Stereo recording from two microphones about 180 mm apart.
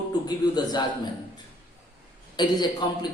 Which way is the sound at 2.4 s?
25° left (ahead or behind).